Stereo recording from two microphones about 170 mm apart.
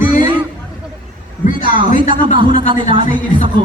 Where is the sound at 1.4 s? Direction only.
50° left (ahead or behind).